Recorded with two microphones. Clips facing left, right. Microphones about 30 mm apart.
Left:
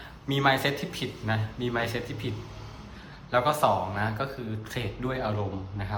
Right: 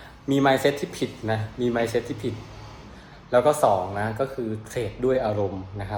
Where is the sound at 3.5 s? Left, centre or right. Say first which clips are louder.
Right 4 dB; left.